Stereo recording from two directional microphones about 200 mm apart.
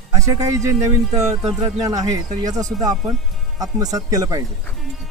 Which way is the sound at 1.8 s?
20° right (ahead or behind).